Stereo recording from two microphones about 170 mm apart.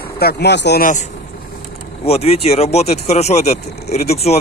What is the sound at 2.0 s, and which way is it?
Speech, 35° left (ahead or behind).